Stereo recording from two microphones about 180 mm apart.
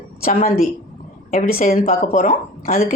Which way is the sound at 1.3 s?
50° left (ahead or behind).